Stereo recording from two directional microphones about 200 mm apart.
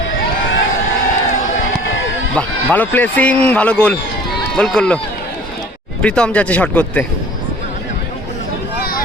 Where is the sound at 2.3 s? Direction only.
10° left (ahead or behind).